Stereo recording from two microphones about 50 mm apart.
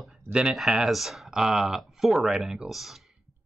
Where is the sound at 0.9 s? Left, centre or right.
Centre.